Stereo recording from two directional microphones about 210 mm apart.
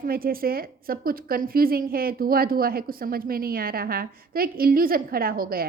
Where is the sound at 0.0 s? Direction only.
45° right (ahead or behind).